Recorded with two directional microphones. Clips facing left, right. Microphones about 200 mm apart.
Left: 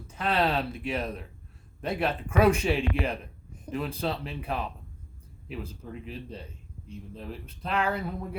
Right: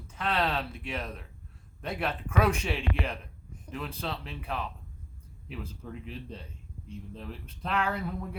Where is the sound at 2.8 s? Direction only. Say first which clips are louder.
Left 5 dB; 40° left (ahead or behind).